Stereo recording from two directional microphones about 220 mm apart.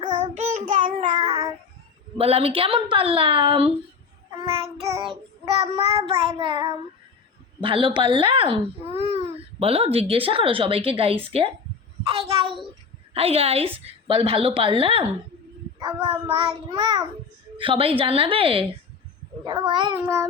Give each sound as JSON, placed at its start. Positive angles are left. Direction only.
{"t": 0.1, "sound": "child singing", "side_deg": -30}
{"t": 2.1, "sound": "speech", "side_deg": -25}